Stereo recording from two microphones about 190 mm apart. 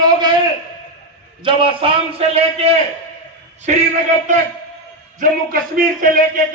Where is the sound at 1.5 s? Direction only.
30° right (ahead or behind).